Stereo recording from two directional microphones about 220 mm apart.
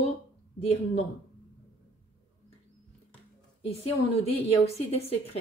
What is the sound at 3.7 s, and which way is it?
A woman's voice, 30° left (ahead or behind).